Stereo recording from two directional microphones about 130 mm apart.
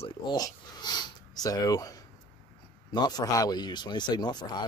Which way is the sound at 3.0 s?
30° left (ahead or behind).